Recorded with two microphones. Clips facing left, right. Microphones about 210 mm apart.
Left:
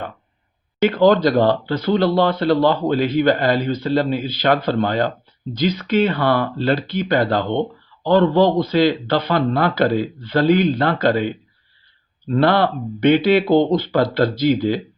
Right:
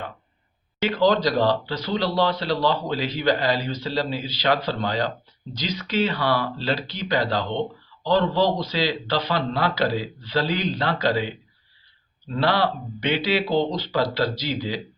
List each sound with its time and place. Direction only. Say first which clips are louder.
0.9 s speech: left 6 dB; 50° left (ahead or behind)